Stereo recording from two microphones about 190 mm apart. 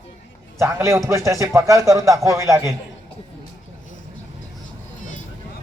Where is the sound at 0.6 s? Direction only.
15° right (ahead or behind).